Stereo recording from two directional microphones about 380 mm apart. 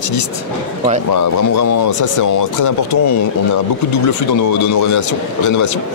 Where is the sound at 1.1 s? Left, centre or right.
Left.